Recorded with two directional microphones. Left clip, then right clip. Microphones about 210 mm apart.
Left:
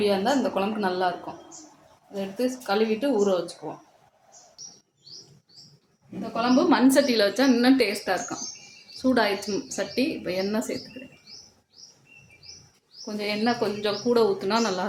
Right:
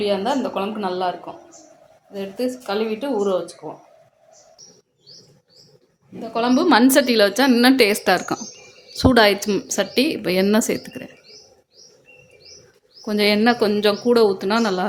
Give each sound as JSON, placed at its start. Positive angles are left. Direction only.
{"t": 0.0, "sound": "speech", "side_deg": -15}
{"t": 2.1, "sound": "speech", "side_deg": -15}
{"t": 6.3, "sound": "a woman's voice", "side_deg": -50}
{"t": 13.1, "sound": "a woman's voice", "side_deg": -40}